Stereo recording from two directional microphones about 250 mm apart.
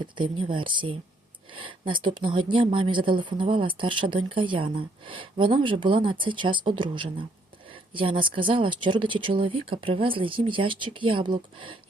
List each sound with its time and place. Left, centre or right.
0.0 s speech: centre